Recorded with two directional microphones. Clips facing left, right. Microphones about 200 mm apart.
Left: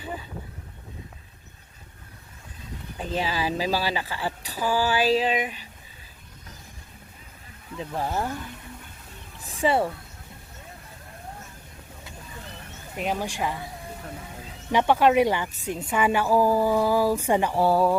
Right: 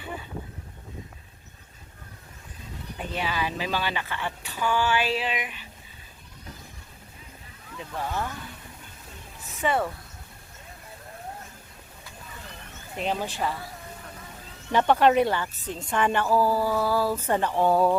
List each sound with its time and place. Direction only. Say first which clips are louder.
3.1 s speech: left 3 dB; 35° left (ahead or behind)
7.8 s speech: left 3 dB; 35° left (ahead or behind)
9.5 s speech: left 3 dB; 30° left (ahead or behind)
13.0 s a woman's voice: left 1 dB; 10° left (ahead or behind)
14.7 s a woman's voice: even; 10° left (ahead or behind)